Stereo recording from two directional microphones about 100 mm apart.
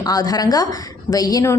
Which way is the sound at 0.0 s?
40° left (ahead or behind).